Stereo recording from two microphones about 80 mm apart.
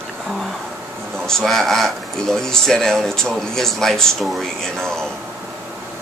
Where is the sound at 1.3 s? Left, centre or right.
Centre.